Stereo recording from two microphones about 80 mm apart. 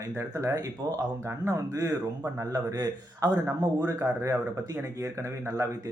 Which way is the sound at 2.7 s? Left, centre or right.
Right.